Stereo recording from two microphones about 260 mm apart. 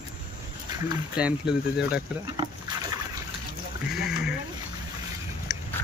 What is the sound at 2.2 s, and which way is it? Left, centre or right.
Speech, centre.